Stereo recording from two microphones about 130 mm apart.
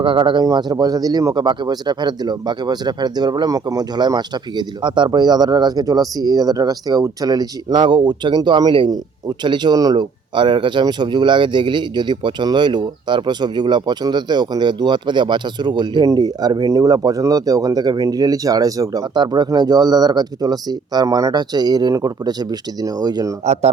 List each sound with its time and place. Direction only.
0.0 s speech: 40° right (ahead or behind)
23.5 s speech: 55° right (ahead or behind)